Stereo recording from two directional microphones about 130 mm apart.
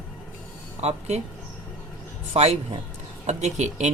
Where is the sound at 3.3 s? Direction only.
65° right (ahead or behind).